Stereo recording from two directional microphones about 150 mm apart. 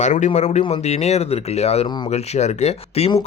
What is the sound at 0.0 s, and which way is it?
Speech, 55° left (ahead or behind).